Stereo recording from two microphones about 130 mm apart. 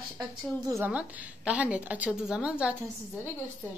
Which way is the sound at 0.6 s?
20° right (ahead or behind).